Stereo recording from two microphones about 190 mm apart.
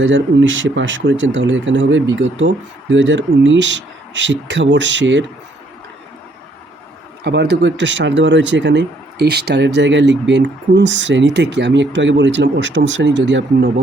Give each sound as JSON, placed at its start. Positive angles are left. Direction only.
{"t": 0.0, "sound": "speech", "side_deg": -75}
{"t": 7.3, "sound": "speech", "side_deg": -65}